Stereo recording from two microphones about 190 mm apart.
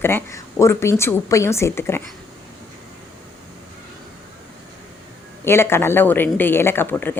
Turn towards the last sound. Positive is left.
turn(degrees=10)  # may be behind; listen again after turning